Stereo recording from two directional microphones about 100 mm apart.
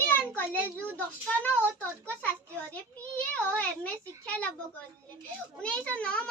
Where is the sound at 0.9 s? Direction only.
15° left (ahead or behind).